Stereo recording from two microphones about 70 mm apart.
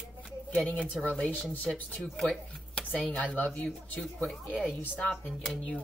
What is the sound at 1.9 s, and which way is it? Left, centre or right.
Speech, centre.